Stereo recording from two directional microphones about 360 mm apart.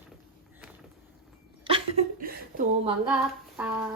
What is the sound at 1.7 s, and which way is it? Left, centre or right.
Laughter, centre.